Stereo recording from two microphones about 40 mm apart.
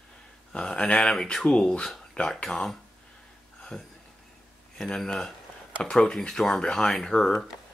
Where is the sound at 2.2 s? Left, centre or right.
Left.